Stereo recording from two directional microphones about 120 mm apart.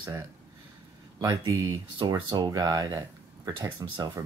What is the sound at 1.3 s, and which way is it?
Speech, 40° right (ahead or behind).